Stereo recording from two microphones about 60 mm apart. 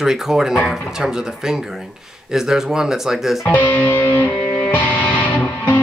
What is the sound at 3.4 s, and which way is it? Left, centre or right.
Music, left.